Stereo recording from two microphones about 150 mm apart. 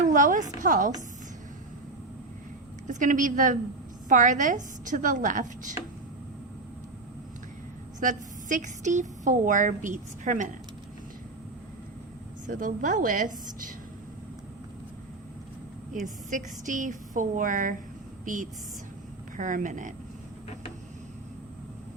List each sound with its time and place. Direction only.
0.0 s a woman's voice: 55° right (ahead or behind)
2.8 s speech: 55° right (ahead or behind)
7.9 s speech: 60° right (ahead or behind)
12.5 s speech: 65° right (ahead or behind)
15.9 s speech: 60° right (ahead or behind)
19.4 s speech: 60° right (ahead or behind)